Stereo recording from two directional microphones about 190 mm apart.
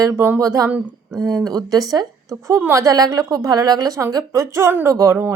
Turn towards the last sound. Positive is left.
turn(degrees=-15)  # may be behind; listen again after turning